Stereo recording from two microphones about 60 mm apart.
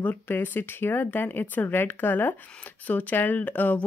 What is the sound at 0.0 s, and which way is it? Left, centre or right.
A woman's voice, left.